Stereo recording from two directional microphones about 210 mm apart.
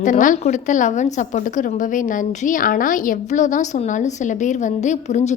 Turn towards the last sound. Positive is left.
turn(degrees=35)  # may be behind; listen again after turning